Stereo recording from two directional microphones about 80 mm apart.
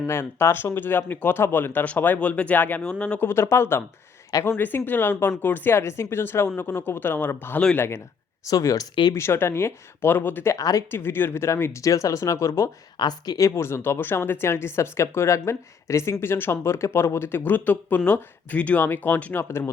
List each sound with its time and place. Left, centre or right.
0.0 s speech: left; by 3.2 s centre
3.2 s speech: left
8.4 s speech: left
9.1 s speech: left
10.5 s speech: left
10.9 s speech: left
13.0 s speech: left
13.5 s speech: left
19.5 s speech: left